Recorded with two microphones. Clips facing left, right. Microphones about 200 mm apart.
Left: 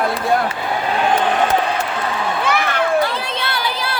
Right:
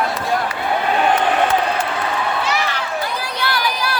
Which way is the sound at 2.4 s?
55° left (ahead or behind).